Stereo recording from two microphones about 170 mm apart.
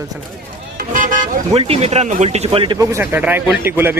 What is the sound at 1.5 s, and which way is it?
Speech, 40° right (ahead or behind).